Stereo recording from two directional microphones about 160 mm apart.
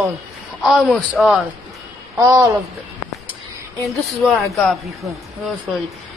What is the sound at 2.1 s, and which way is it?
Speech, 20° right (ahead or behind).